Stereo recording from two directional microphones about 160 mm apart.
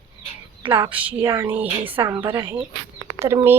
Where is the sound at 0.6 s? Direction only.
30° right (ahead or behind).